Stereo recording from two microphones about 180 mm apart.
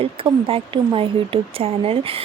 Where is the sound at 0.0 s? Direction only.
30° right (ahead or behind).